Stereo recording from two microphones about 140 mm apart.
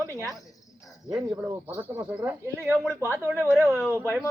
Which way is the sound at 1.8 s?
15° right (ahead or behind).